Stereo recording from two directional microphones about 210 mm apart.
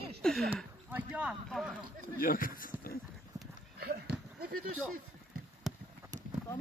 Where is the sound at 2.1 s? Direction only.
40° left (ahead or behind).